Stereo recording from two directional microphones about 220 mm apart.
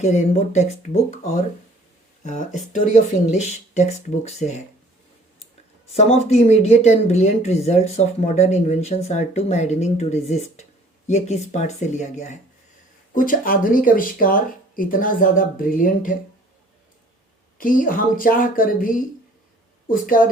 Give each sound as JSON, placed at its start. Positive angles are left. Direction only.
{"t": 0.0, "sound": "speech", "side_deg": 30}
{"t": 2.2, "sound": "speech", "side_deg": 35}
{"t": 6.0, "sound": "speech", "side_deg": 30}
{"t": 17.6, "sound": "speech", "side_deg": 40}